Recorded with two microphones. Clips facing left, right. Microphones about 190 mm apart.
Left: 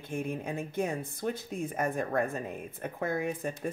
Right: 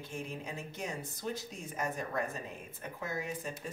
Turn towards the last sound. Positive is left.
turn(degrees=55)  # may be behind; listen again after turning